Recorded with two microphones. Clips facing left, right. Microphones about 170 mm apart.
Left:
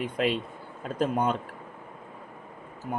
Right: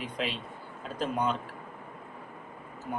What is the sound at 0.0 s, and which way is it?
Speech, 50° left (ahead or behind).